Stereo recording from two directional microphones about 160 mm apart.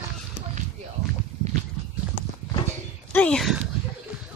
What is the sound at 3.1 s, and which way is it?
Speech, 5° left (ahead or behind).